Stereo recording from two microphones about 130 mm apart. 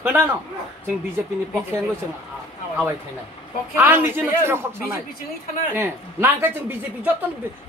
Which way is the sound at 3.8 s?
15° right (ahead or behind).